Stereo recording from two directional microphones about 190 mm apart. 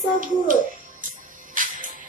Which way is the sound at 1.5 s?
45° right (ahead or behind).